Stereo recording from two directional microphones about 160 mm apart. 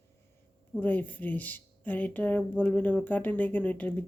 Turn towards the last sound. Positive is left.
turn(degrees=10)  # may be behind; listen again after turning